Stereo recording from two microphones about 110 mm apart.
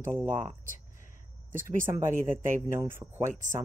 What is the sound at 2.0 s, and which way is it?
Speech, 25° right (ahead or behind).